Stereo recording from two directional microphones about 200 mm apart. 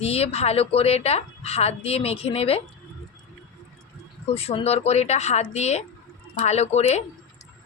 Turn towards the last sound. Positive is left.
turn(degrees=35)  # may be behind; listen again after turning